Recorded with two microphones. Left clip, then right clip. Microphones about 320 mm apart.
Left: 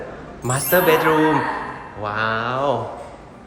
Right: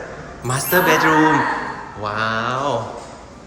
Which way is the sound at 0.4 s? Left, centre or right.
Centre.